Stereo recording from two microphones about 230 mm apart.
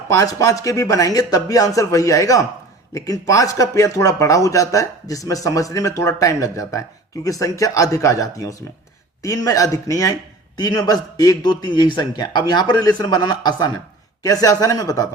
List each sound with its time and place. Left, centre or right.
0.1 s speech: centre